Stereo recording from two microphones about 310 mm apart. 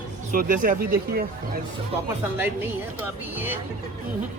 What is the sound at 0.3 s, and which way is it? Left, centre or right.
Speech, right.